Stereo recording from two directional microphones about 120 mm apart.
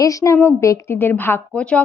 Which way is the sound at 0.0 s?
25° left (ahead or behind).